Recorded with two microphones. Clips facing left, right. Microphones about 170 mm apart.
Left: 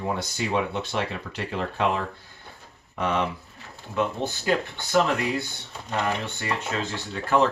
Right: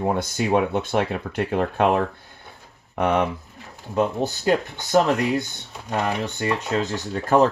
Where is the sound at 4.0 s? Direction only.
35° right (ahead or behind).